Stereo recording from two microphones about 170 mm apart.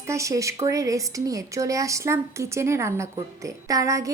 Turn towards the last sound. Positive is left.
turn(degrees=-20)  # may be behind; listen again after turning